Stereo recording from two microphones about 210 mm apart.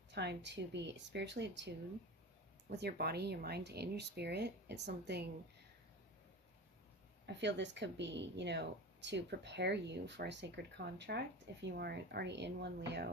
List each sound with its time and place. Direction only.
0.1 s speech: 55° right (ahead or behind)
7.3 s speech: 55° right (ahead or behind)